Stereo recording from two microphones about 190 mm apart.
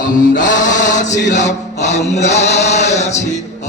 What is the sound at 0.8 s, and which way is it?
Chant, 40° left (ahead or behind).